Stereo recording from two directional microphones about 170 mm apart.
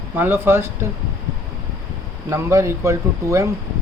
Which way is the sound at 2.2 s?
15° right (ahead or behind).